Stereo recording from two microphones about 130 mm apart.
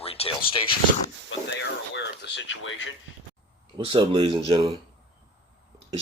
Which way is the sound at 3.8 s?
45° right (ahead or behind).